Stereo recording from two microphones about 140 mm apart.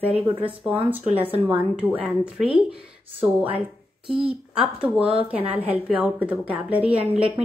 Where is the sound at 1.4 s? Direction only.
15° right (ahead or behind).